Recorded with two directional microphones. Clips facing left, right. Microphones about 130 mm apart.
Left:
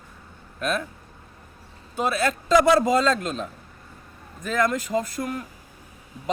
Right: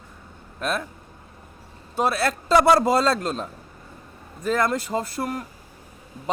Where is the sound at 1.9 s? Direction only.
35° right (ahead or behind).